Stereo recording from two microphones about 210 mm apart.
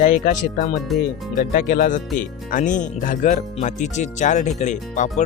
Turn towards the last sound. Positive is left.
turn(degrees=35)  # may be behind; listen again after turning